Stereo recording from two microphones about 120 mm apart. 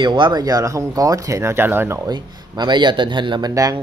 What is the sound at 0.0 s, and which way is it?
Speech, 40° right (ahead or behind).